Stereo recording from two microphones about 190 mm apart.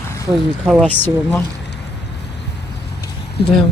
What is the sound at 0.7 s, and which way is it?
Speech, 5° left (ahead or behind).